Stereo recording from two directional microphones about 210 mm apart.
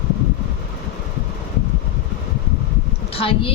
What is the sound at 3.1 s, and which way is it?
Speech, 25° left (ahead or behind).